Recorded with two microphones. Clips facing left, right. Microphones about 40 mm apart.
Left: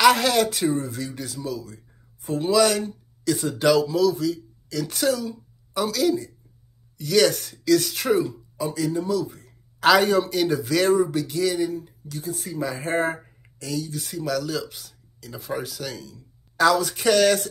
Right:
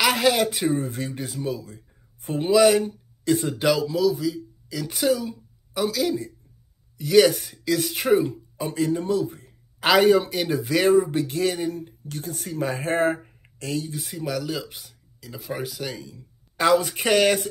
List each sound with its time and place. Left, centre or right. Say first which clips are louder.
0.0 s speech: left 2 dB; centre
0.7 s speech: even; right
2.5 s speech: right 3 dB; centre
3.6 s speech: left 3 dB; centre; by 9.5 s right
9.8 s speech: even; centre
11.1 s speech: even; right
13.2 s a sound: right 2 dB; right
13.9 s speech: left 2 dB; centre